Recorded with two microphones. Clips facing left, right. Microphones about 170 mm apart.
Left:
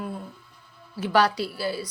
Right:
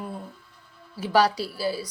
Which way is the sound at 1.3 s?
35° right (ahead or behind).